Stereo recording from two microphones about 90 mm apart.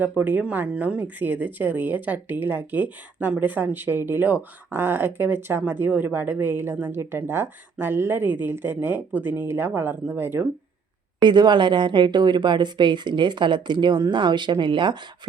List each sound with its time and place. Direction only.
0.2 s speech: 15° right (ahead or behind)
11.2 s a woman's voice: 55° right (ahead or behind)